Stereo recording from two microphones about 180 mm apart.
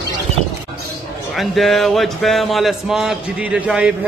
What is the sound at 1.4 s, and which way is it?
A man's voice, centre (ahead or behind).